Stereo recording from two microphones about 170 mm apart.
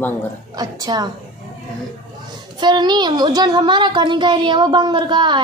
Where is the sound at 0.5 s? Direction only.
25° right (ahead or behind).